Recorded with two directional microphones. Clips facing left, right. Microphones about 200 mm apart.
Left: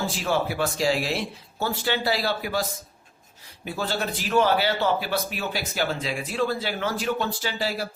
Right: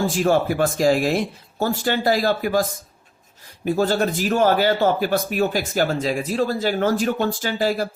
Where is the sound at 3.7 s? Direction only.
45° right (ahead or behind).